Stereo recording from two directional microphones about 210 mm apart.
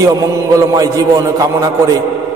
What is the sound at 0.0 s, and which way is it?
A man's voice, 15° right (ahead or behind).